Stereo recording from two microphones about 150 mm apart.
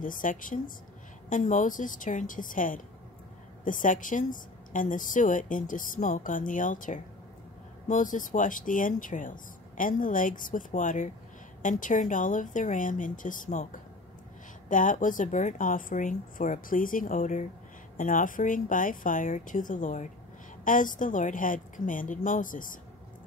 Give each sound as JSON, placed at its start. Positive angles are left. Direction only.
{"t": 0.0, "sound": "a woman's voice", "side_deg": 65}